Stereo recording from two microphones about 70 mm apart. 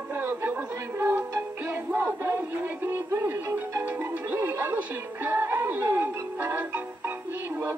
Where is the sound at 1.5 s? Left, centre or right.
Right.